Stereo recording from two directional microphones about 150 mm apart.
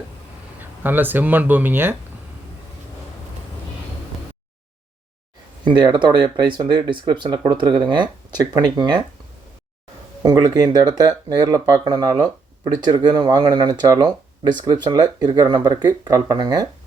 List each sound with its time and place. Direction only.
0.6 s speech: 10° right (ahead or behind)
5.6 s speech: 30° right (ahead or behind)
10.2 s speech: 25° right (ahead or behind)